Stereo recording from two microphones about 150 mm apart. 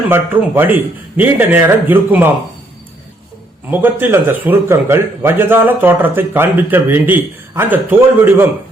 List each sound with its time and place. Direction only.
0.1 s a man's voice: 15° right (ahead or behind)
3.7 s a man's voice: 10° right (ahead or behind)